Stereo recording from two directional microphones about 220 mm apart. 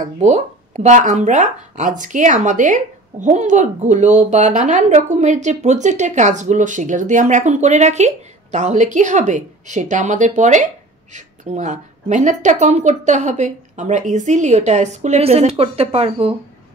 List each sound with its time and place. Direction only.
0.2 s speech: 35° right (ahead or behind)